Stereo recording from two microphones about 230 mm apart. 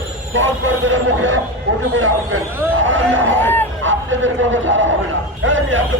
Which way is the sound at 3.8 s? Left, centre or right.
Right.